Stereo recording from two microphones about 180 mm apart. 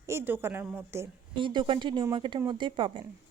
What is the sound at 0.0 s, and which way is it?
Speech, 15° right (ahead or behind).